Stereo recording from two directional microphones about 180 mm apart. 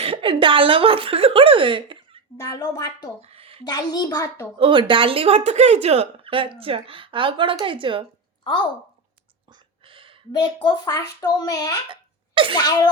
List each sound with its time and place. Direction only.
0.0 s a woman's voice: 30° right (ahead or behind)
2.4 s a child's voice: 20° left (ahead or behind)
3.2 s a sound: 35° right (ahead or behind)
3.6 s a child's voice: 25° left (ahead or behind)
4.5 s a woman's voice: 30° right (ahead or behind)
9.5 s a sound: 30° right (ahead or behind)
10.3 s a child's voice: 25° left (ahead or behind)
11.9 s a sound: 30° right (ahead or behind)
12.5 s a child's voice: 25° left (ahead or behind)